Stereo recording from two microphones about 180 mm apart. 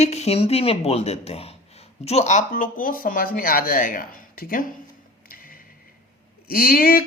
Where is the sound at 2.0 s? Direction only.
35° left (ahead or behind).